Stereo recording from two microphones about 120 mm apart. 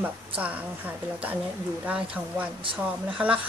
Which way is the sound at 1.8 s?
10° right (ahead or behind).